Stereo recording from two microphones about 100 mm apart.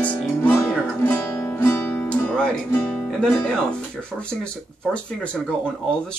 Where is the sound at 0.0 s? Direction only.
15° left (ahead or behind).